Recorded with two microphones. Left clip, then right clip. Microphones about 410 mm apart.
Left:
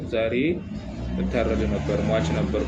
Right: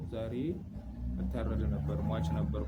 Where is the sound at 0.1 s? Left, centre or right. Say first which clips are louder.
Left 15 dB; right.